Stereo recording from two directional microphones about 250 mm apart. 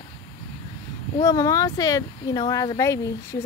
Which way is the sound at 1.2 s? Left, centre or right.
Centre.